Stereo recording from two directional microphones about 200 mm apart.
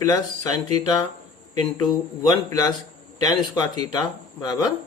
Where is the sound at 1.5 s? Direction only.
20° left (ahead or behind).